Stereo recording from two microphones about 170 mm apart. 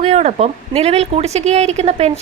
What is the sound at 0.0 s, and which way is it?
A woman's voice, 40° right (ahead or behind).